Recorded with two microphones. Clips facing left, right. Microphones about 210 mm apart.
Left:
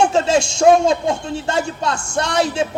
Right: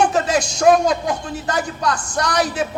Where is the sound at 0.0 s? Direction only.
25° left (ahead or behind).